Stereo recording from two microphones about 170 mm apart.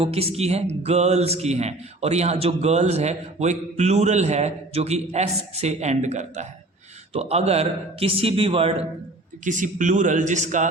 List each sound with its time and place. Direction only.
0.0 s music: 35° right (ahead or behind)
9.4 s a man's voice: 50° right (ahead or behind)